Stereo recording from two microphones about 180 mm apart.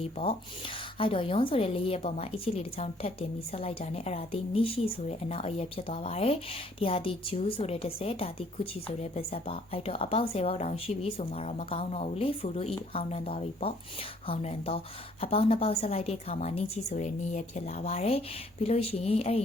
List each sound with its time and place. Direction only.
0.0 s speech: 35° left (ahead or behind)